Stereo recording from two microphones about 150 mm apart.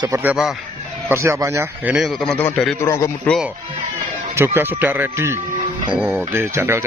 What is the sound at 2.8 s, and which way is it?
Speech, 20° left (ahead or behind).